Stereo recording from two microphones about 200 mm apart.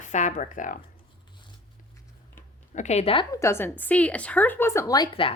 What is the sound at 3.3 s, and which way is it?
A woman's voice, 15° left (ahead or behind).